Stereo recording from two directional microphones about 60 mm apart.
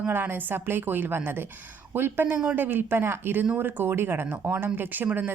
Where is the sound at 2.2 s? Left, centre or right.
Right.